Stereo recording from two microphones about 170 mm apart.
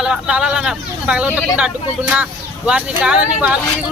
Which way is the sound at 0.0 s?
5° right (ahead or behind).